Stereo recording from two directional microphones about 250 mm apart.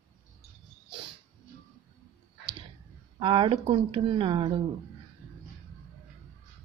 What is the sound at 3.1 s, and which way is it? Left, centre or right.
Speech, centre.